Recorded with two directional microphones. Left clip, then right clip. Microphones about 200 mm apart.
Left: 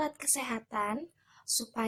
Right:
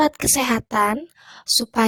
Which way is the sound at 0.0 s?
40° right (ahead or behind).